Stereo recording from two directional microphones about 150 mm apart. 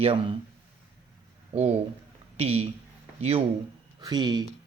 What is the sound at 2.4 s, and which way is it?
Speech, 40° right (ahead or behind).